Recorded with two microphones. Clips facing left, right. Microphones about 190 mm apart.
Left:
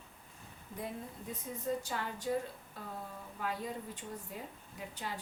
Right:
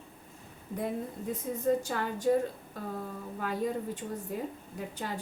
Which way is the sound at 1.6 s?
50° right (ahead or behind).